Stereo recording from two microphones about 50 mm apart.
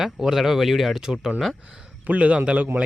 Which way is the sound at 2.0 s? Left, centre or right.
Right.